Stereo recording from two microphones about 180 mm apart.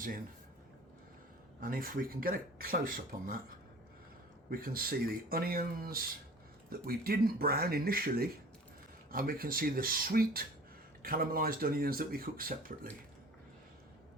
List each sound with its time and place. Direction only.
1.6 s speech: 55° right (ahead or behind)
4.4 s speech: 55° right (ahead or behind)